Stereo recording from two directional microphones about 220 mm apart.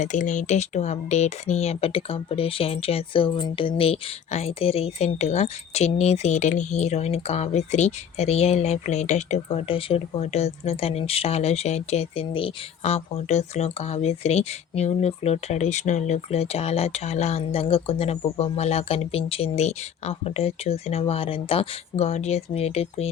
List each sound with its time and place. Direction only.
0.0 s speech: 35° left (ahead or behind)